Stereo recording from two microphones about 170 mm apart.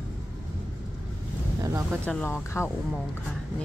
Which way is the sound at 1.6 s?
20° right (ahead or behind).